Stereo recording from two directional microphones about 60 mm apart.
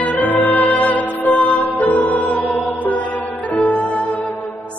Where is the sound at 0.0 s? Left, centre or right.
Left.